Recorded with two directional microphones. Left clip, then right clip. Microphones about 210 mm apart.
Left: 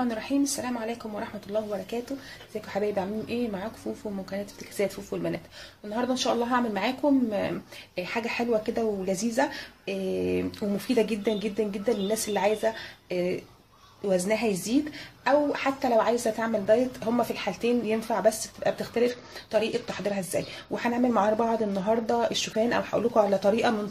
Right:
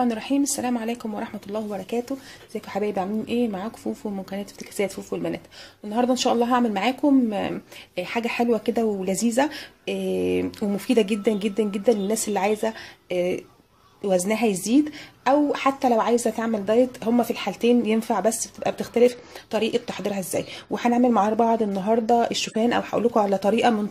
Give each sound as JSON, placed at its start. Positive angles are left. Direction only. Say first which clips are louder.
{"t": 0.0, "sound": "a woman's voice", "louder": "right 4 dB", "side_deg": -40}
{"t": 2.7, "sound": "a woman's voice", "louder": "right 3 dB", "side_deg": -35}